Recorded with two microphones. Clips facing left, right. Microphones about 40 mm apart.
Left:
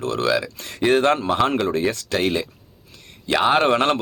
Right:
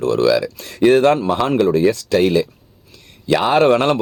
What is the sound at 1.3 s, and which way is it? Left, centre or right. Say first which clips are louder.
A man's voice: right 4 dB; left.